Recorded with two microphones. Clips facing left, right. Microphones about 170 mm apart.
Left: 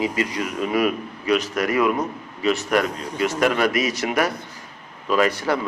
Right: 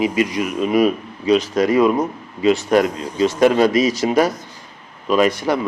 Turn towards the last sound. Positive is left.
turn(degrees=-15)  # may be behind; listen again after turning